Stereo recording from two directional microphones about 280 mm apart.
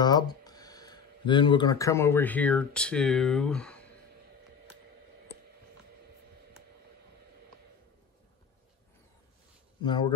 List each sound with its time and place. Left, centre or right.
0.0 s speech: centre
9.8 s speech: centre